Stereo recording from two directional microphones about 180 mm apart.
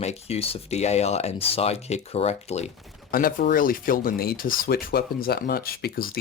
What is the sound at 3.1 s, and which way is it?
Speech, 50° left (ahead or behind).